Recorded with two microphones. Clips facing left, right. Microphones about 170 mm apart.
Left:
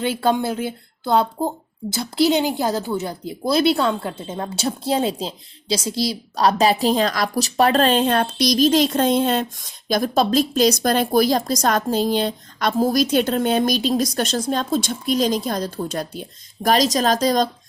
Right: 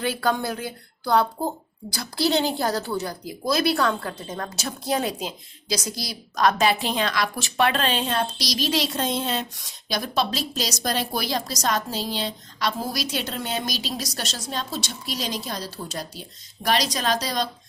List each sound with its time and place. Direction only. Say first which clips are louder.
0.0 s a woman's voice: left 4 dB; 25° left (ahead or behind); by 16.2 s 55° left (ahead or behind)
16.6 s a woman's voice: left 6 dB; 45° left (ahead or behind)